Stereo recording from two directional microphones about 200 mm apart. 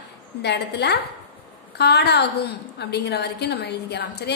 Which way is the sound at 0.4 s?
55° left (ahead or behind).